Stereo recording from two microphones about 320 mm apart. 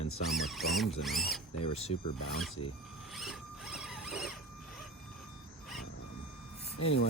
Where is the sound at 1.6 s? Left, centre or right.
Centre.